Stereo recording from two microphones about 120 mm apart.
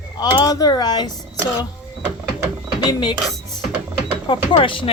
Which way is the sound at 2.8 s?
35° left (ahead or behind).